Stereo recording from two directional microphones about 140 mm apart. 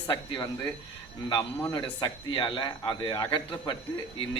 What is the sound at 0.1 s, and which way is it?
A man's voice, 35° left (ahead or behind).